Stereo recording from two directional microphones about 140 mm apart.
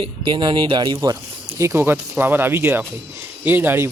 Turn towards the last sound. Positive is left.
turn(degrees=-15)  # may be behind; listen again after turning